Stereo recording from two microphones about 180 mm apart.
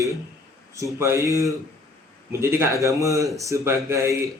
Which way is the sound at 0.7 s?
15° right (ahead or behind).